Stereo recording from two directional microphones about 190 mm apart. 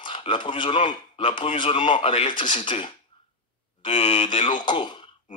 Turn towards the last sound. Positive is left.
turn(degrees=25)  # may be behind; listen again after turning